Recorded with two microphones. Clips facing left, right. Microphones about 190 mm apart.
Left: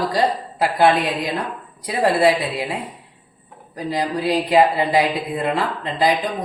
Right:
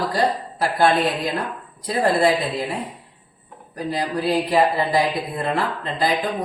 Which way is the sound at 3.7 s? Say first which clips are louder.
Left 1 dB; 15° left (ahead or behind).